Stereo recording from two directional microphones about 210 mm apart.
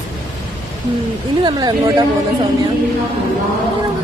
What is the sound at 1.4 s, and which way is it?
Speech, 20° right (ahead or behind).